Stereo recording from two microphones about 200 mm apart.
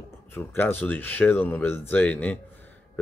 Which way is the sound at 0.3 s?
10° left (ahead or behind).